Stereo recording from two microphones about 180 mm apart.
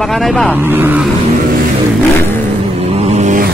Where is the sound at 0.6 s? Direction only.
10° right (ahead or behind).